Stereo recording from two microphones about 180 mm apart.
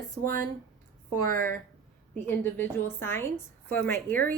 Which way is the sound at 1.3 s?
55° right (ahead or behind).